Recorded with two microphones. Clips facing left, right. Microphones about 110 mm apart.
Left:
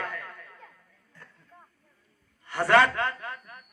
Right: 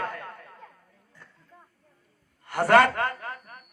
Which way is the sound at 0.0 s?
35° right (ahead or behind).